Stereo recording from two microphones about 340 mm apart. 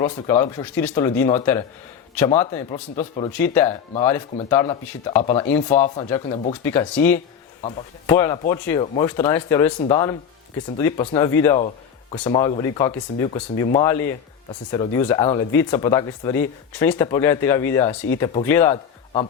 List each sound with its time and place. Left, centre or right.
0.0 s speech: centre
2.4 s speech: centre